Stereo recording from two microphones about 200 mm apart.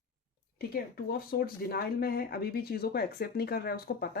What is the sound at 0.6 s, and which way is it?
Speech, 50° left (ahead or behind).